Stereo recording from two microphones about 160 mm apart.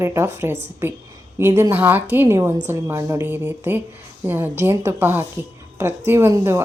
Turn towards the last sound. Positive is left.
turn(degrees=-15)  # may be behind; listen again after turning